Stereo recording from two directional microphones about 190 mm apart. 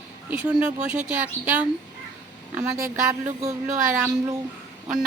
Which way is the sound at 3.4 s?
35° right (ahead or behind).